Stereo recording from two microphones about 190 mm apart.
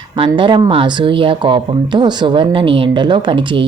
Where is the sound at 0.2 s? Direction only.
25° right (ahead or behind).